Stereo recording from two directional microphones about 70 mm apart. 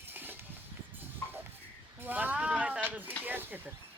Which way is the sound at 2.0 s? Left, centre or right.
Right.